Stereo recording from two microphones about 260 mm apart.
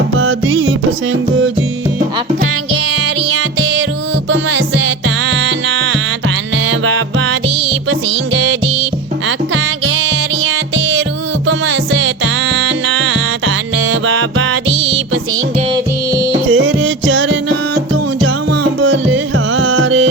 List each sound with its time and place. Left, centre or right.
0.2 s music: right
4.3 s music: right
11.4 s music: right
16.5 s music: right
18.8 s music: right